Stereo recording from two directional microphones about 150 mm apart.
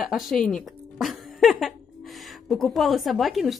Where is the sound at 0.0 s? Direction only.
Centre (ahead or behind).